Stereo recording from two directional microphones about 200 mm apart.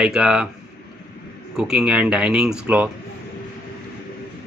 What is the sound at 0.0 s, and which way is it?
Speech, 5° right (ahead or behind).